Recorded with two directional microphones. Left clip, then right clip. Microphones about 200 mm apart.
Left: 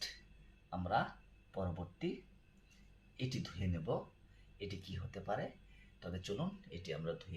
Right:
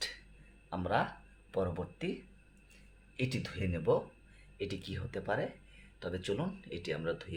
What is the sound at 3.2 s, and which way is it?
Speech, 55° right (ahead or behind).